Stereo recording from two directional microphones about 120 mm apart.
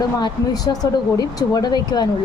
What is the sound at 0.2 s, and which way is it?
Speech, 30° left (ahead or behind).